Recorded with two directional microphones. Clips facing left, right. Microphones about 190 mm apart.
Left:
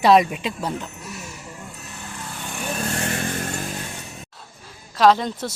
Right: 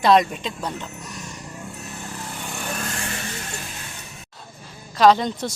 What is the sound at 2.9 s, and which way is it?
Vehicle, 45° left (ahead or behind).